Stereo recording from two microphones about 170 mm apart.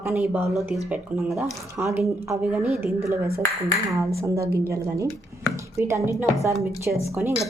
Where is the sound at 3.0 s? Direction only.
15° right (ahead or behind).